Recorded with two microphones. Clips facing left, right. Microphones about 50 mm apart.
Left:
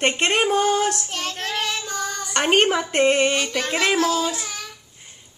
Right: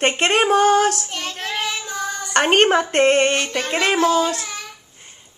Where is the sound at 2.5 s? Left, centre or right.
Right.